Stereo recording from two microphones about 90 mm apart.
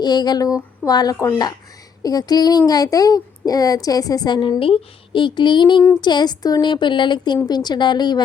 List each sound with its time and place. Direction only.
0.0 s speech: 50° left (ahead or behind)
4.6 s a woman's voice: 75° left (ahead or behind); by 8.2 s 55° left (ahead or behind)